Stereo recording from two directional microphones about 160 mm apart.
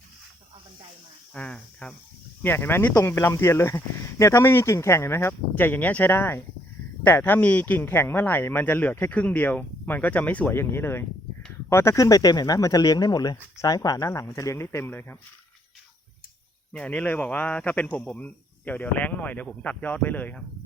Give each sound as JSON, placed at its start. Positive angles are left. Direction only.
{"t": 1.3, "sound": "speech", "side_deg": 10}
{"t": 16.7, "sound": "speech", "side_deg": 10}